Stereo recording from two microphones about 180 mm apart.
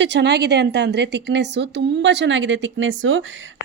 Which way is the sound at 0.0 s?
70° right (ahead or behind).